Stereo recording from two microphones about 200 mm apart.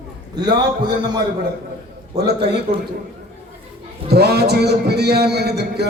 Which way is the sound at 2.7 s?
30° right (ahead or behind).